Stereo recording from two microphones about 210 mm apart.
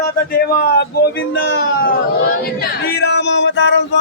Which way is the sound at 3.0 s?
55° left (ahead or behind).